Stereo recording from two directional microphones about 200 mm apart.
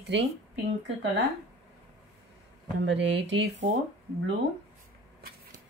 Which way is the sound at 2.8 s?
65° right (ahead or behind).